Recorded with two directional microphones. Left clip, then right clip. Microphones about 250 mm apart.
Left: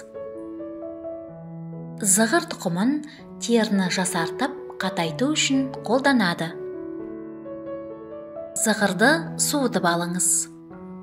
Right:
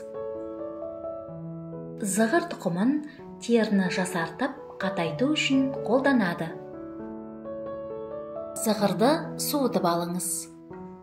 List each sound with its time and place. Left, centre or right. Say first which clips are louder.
2.0 s a woman's voice: left 3 dB; left
8.6 s a woman's voice: left 4 dB; left